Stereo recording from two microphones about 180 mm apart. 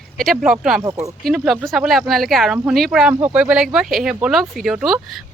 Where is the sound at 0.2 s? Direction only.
Centre (ahead or behind).